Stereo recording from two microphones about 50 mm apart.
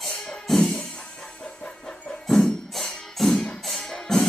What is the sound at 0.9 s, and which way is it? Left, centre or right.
Music, centre.